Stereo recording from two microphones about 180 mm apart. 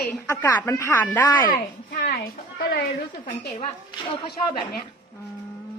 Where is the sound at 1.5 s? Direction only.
60° left (ahead or behind).